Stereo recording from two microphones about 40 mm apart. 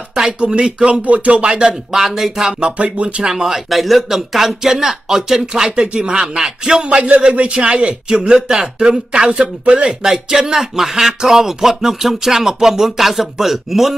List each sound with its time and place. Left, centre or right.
0.4 s a man's voice: right
1.0 s speech: right
1.5 s a man's voice: right
2.0 s speech: centre
2.8 s speech: right
3.3 s speech: centre
3.7 s a man's voice: centre
9.3 s a man's voice: right
9.8 s speech: centre